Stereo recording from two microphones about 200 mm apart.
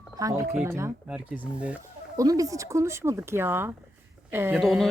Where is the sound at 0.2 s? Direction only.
15° right (ahead or behind).